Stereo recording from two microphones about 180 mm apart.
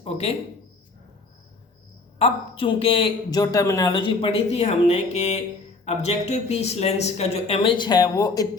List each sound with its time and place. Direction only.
0.0 s speech: 35° left (ahead or behind)
2.1 s speech: 30° left (ahead or behind)